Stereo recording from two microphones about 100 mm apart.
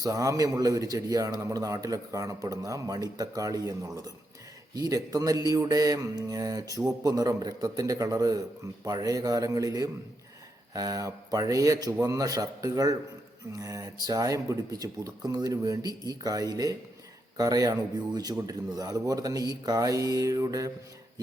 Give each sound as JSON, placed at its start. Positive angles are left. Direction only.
{"t": 0.0, "sound": "a man's voice", "side_deg": -35}